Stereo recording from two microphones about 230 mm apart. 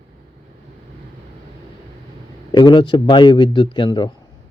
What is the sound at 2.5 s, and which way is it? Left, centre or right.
Speech, centre.